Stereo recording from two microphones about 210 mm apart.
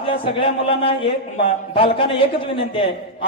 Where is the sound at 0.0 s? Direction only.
25° left (ahead or behind).